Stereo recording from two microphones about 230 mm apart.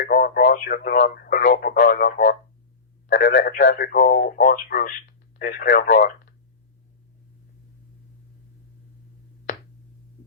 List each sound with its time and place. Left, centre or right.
0.0 s speech: left
3.8 s speech: left